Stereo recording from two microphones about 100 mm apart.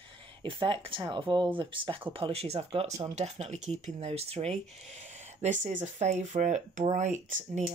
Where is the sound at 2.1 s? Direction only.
75° right (ahead or behind); by 4.6 s 90° right.